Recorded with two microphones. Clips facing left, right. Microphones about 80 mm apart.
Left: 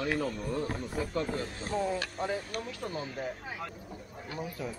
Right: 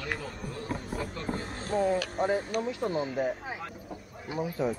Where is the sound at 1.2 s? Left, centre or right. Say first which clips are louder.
Even; right.